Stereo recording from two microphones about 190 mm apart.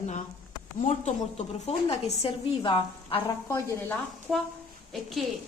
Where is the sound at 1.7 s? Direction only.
30° left (ahead or behind).